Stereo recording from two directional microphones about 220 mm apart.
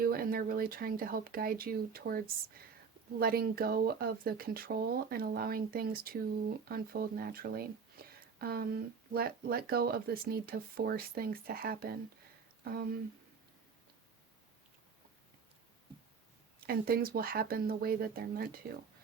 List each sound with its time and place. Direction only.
0.0 s speech: 40° right (ahead or behind)
16.6 s speech: 45° right (ahead or behind)